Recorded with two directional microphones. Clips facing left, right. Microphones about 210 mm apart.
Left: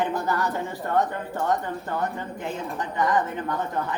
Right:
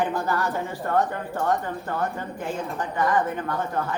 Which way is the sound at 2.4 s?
20° left (ahead or behind).